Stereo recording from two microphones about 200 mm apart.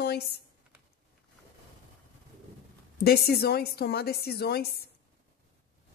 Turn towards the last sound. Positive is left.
turn(degrees=50)  # may be behind; listen again after turning